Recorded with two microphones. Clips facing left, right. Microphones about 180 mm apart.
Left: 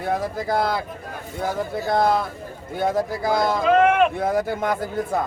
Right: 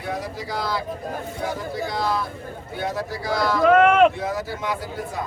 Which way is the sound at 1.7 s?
50° left (ahead or behind).